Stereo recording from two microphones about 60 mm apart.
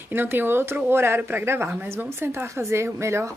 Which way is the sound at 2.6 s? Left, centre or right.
Right.